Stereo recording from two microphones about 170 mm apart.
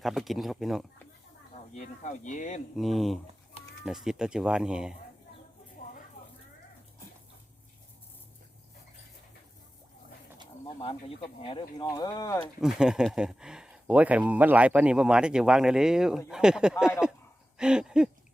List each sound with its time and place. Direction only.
0.0 s speech: centre (ahead or behind)
1.7 s speech: 45° left (ahead or behind)
2.7 s speech: centre (ahead or behind)
11.3 s speech: 30° left (ahead or behind)
12.6 s speech: 5° right (ahead or behind)